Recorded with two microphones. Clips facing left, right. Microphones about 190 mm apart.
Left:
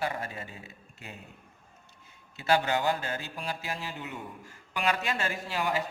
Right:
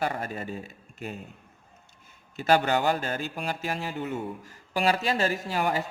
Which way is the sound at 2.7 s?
55° right (ahead or behind).